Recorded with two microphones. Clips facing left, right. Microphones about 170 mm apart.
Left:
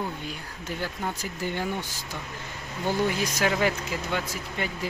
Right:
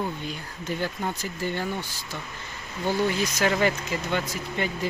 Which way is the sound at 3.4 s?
5° left (ahead or behind).